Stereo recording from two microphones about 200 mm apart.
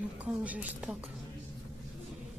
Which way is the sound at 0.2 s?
5° right (ahead or behind).